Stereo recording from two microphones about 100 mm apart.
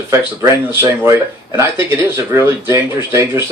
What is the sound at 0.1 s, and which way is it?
Speech, 25° right (ahead or behind).